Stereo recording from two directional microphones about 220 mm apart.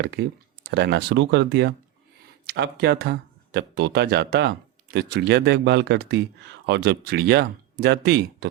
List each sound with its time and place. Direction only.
0.0 s speech: 50° right (ahead or behind)